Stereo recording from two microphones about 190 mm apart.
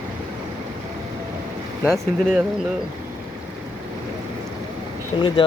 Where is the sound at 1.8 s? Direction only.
Centre (ahead or behind).